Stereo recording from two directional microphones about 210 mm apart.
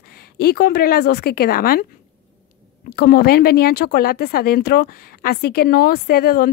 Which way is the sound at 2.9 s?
45° left (ahead or behind).